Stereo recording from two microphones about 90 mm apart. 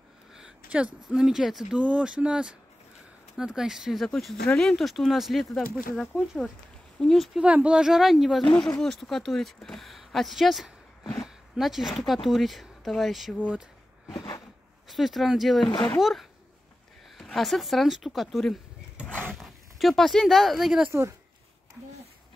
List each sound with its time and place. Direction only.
0.3 s a woman's voice: 10° right (ahead or behind)
5.6 s speech: 10° left (ahead or behind)
6.1 s a woman's voice: 5° right (ahead or behind)
7.3 s speech: 15° right (ahead or behind)
8.5 s speech: 10° left (ahead or behind)
13.4 s speech: 15° right (ahead or behind)
14.1 s a sound: 50° left (ahead or behind)
14.9 s a woman's voice: centre (ahead or behind)